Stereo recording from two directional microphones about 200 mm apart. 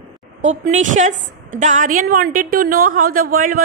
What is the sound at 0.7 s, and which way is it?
A woman's voice, 35° right (ahead or behind).